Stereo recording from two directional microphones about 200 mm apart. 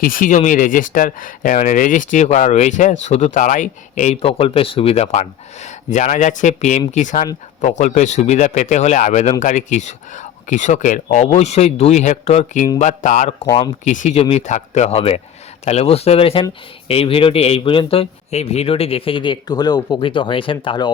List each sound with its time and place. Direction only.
0.0 s speech: 45° left (ahead or behind); by 20.9 s 25° left (ahead or behind)